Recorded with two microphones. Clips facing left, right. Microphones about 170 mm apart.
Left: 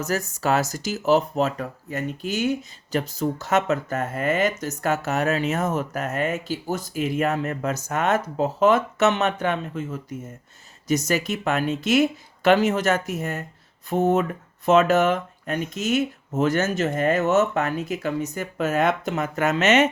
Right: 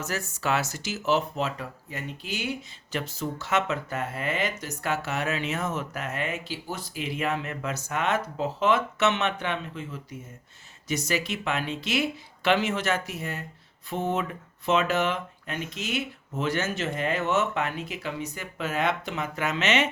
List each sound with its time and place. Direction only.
0.0 s speech: 40° left (ahead or behind)